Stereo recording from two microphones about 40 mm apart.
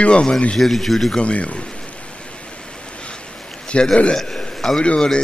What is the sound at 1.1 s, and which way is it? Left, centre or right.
Speech, left.